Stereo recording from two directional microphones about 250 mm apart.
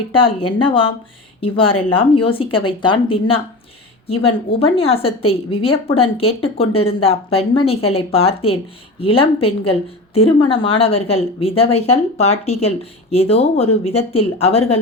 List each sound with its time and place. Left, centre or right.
0.1 s a woman's voice: left
4.6 s a woman's voice: left